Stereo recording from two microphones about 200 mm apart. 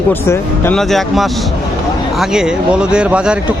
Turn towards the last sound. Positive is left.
turn(degrees=-5)  # may be behind; listen again after turning